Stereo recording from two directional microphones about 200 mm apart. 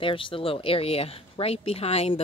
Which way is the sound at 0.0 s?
25° left (ahead or behind).